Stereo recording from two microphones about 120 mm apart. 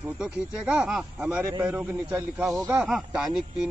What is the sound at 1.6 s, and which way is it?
A man's voice, 15° right (ahead or behind).